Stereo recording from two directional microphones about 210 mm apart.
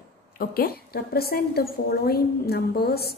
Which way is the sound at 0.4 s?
45° left (ahead or behind).